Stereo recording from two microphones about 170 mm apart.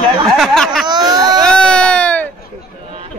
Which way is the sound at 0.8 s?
25° right (ahead or behind).